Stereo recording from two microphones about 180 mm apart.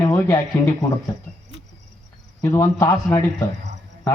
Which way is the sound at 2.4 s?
15° left (ahead or behind).